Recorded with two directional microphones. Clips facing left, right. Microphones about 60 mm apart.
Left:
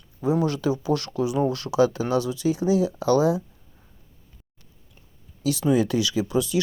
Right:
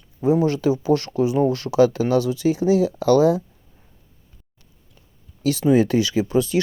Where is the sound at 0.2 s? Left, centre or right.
Right.